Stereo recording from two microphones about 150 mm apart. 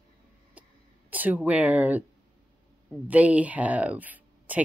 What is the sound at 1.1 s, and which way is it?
Speech, 10° right (ahead or behind).